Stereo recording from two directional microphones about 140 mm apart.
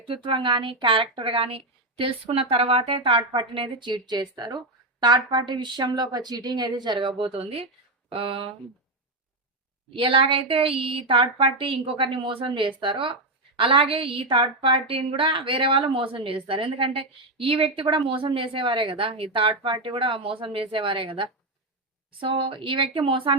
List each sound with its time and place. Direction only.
0.1 s speech: 35° right (ahead or behind)
9.9 s speech: 40° right (ahead or behind)